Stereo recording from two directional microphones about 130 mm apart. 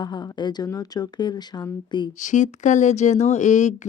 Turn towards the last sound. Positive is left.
turn(degrees=65)  # may be behind; listen again after turning